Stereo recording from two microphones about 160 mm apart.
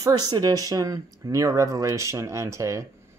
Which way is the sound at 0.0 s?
25° right (ahead or behind).